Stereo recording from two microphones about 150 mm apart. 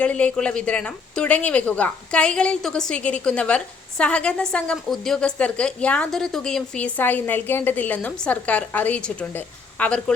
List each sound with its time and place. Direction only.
0.0 s a woman's voice: 10° left (ahead or behind)